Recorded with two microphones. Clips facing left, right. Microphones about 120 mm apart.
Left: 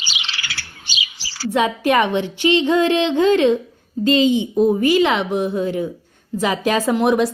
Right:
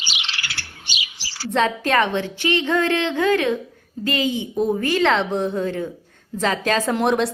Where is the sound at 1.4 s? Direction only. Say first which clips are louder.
Left 3 dB; 10° left (ahead or behind).